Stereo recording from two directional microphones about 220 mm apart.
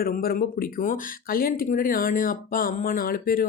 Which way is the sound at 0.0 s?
40° left (ahead or behind).